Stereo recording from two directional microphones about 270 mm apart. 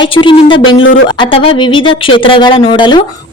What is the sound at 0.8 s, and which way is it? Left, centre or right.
Speech, left.